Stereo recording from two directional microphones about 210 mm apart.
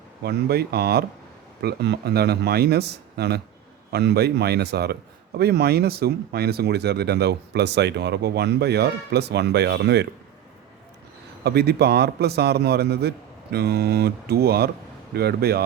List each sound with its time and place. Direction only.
0.2 s a man's voice: 50° right (ahead or behind)
11.4 s a man's voice: 50° right (ahead or behind)